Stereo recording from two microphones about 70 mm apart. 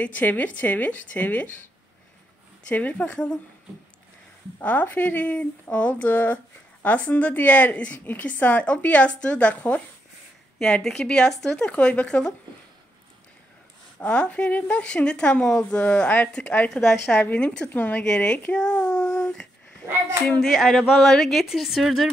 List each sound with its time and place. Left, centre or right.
0.0 s speech: left
2.7 s speech: left
4.6 s speech: left
10.6 s a woman's voice: centre
13.9 s a woman's voice: centre
16.7 s a woman's voice: centre
17.2 s a woman's voice: centre
18.5 s a sound: centre
20.3 s a woman's voice: centre